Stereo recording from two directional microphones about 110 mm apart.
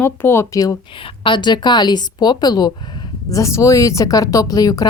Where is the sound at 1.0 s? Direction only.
50° left (ahead or behind); by 4.9 s 35° left (ahead or behind).